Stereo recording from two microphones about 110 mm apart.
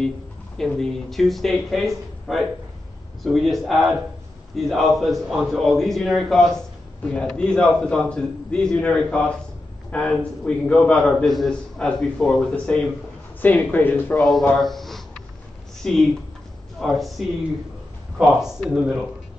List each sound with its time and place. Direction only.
0.6 s a man's voice: 5° left (ahead or behind)
14.6 s a sound: centre (ahead or behind)
15.8 s a man's voice: 5° left (ahead or behind)